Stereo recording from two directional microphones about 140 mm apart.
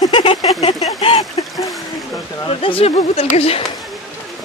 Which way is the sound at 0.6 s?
45° left (ahead or behind).